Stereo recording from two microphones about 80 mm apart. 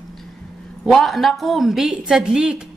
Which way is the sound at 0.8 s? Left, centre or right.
Centre.